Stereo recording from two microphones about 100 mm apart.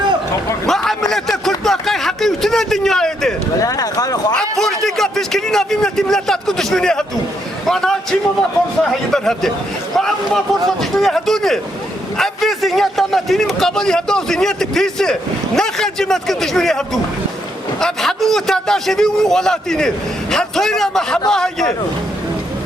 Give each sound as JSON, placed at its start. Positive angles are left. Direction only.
{"t": 0.7, "sound": "a sound", "side_deg": 5}
{"t": 3.6, "sound": "speech", "side_deg": 35}
{"t": 4.4, "sound": "a man's voice", "side_deg": 5}